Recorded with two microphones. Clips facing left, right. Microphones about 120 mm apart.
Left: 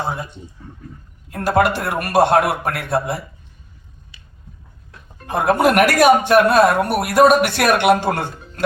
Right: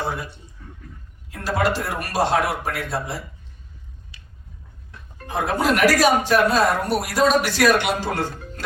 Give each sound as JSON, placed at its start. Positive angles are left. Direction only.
{"t": 0.1, "sound": "a sound", "side_deg": 25}
{"t": 1.3, "sound": "speech", "side_deg": 55}
{"t": 5.2, "sound": "speech", "side_deg": 60}